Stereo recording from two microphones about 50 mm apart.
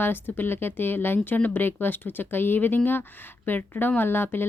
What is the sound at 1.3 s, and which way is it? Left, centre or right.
Speech, left.